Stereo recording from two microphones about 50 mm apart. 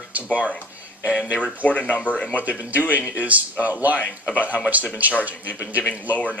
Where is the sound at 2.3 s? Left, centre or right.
Right.